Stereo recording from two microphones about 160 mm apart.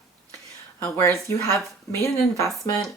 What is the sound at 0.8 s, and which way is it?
Speech, 20° left (ahead or behind).